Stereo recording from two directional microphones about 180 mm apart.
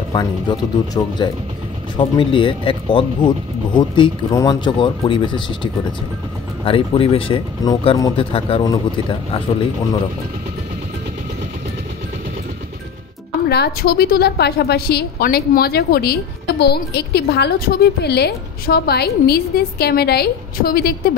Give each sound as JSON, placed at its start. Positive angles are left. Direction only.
{"t": 0.1, "sound": "speech", "side_deg": 25}
{"t": 13.5, "sound": "a woman's voice", "side_deg": 60}